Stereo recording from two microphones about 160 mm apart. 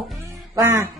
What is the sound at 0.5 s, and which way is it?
Speech, 20° right (ahead or behind).